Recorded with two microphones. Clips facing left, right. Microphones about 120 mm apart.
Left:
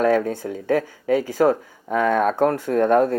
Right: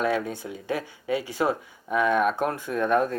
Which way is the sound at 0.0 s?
45° left (ahead or behind).